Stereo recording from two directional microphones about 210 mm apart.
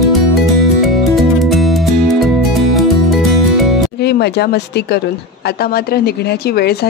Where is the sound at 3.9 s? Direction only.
50° left (ahead or behind).